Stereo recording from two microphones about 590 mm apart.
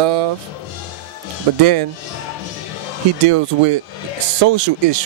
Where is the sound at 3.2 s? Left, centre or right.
Right.